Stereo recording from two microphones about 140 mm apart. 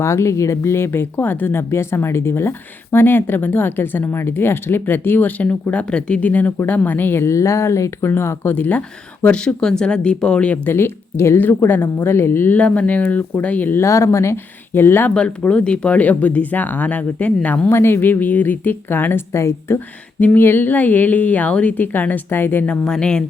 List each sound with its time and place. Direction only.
0.0 s speech: 20° left (ahead or behind)